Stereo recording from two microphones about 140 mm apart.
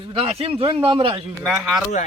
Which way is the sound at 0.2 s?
40° right (ahead or behind).